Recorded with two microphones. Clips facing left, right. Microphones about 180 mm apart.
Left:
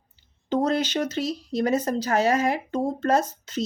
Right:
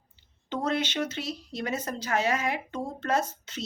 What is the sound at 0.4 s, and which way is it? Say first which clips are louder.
Speech: left 6 dB; 40° left (ahead or behind).